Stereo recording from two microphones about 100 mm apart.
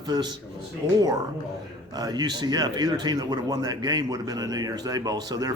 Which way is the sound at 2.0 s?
45° right (ahead or behind).